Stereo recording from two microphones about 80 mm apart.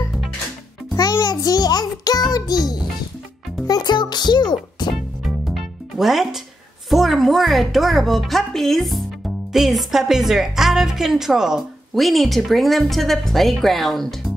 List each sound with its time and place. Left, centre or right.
1.2 s child singing: left
2.3 s music: left
5.5 s music: centre
6.9 s a woman's voice: centre